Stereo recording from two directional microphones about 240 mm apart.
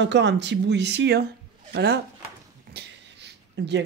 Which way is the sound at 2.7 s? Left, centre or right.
Right.